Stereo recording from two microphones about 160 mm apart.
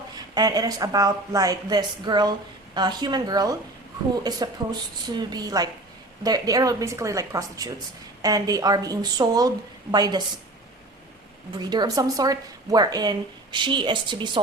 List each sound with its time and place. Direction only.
0.3 s speech: 25° right (ahead or behind)
11.7 s speech: 25° right (ahead or behind)